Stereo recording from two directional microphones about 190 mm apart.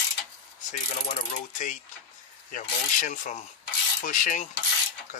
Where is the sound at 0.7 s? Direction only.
40° left (ahead or behind).